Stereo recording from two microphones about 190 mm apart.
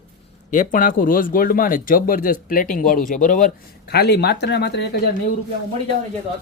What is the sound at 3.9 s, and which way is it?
Speech, 60° left (ahead or behind).